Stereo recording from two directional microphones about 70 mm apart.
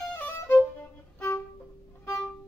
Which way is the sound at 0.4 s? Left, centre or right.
Left.